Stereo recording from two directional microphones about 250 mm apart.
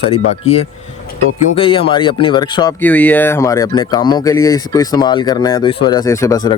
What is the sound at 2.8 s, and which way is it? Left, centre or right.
Speech, centre.